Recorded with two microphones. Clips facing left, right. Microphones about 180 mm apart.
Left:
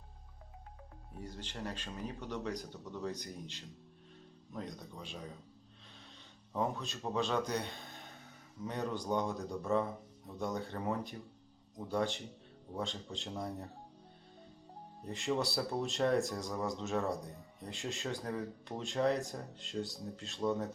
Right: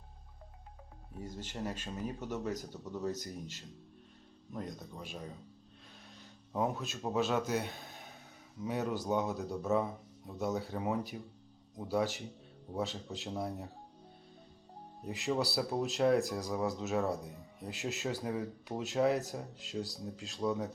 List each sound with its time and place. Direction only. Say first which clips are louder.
1.5 s speech: right 3 dB; 10° right (ahead or behind)
3.1 s speech: right 3 dB; 45° right (ahead or behind)
4.5 s speech: right 2 dB; 5° right (ahead or behind)
6.5 s speech: right 2 dB; 5° right (ahead or behind)
15.0 s speech: right 1 dB; 5° right (ahead or behind)